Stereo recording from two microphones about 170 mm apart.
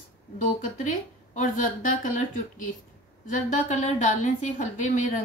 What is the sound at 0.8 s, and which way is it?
A woman's voice, 50° left (ahead or behind).